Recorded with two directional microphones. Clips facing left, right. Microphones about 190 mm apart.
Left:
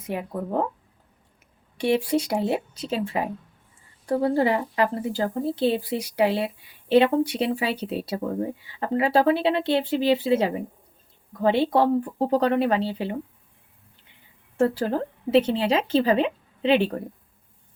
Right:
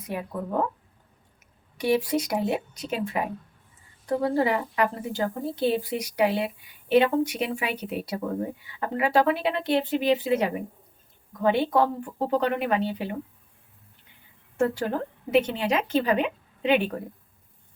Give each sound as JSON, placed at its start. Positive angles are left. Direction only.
{"t": 0.1, "sound": "a woman's voice", "side_deg": 25}
{"t": 1.8, "sound": "a woman's voice", "side_deg": 30}
{"t": 14.6, "sound": "speech", "side_deg": 30}